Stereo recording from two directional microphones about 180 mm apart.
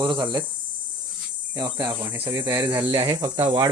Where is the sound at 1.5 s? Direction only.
20° right (ahead or behind).